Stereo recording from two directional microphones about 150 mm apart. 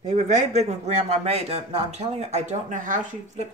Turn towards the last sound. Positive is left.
turn(degrees=-60)  # may be behind; listen again after turning